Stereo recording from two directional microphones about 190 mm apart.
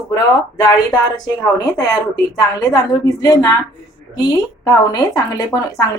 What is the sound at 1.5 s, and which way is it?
Speech, 20° left (ahead or behind).